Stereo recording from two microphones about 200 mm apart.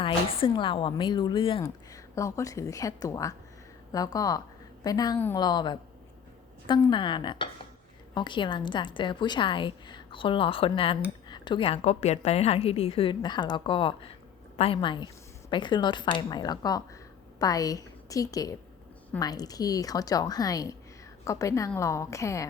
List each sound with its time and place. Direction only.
0.0 s a woman's voice: 25° left (ahead or behind)
6.9 s a woman's voice: 25° left (ahead or behind)